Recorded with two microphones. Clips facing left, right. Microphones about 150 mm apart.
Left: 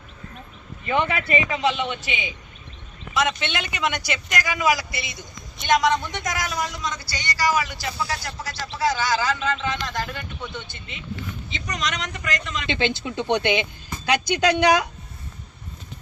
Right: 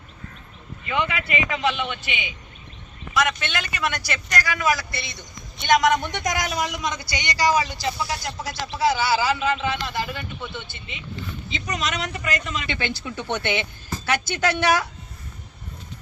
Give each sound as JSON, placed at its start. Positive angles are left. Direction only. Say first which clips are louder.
{"t": 0.9, "sound": "a man's voice", "louder": "left 3 dB", "side_deg": 35}
{"t": 3.2, "sound": "a man's voice", "louder": "even", "side_deg": 25}
{"t": 4.9, "sound": "speech", "louder": "even", "side_deg": 90}
{"t": 6.0, "sound": "speech", "louder": "right 2 dB", "side_deg": -20}
{"t": 7.9, "sound": "a man's voice", "louder": "even", "side_deg": -15}
{"t": 12.6, "sound": "a man's voice", "louder": "left 4 dB", "side_deg": 20}